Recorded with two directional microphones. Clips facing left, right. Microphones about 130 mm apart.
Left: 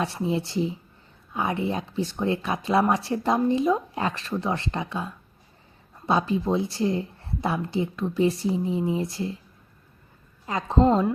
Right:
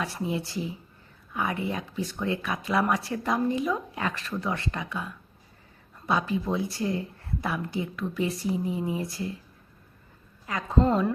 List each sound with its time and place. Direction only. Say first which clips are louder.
0.0 s a woman's voice: left 4 dB; 25° left (ahead or behind)
10.4 s a woman's voice: left 4 dB; 30° left (ahead or behind)